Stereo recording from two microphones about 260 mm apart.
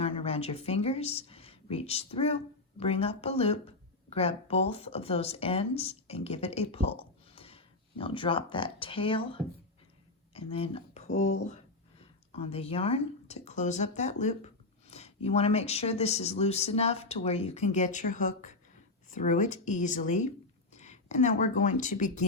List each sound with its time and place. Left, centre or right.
0.0 s speech: left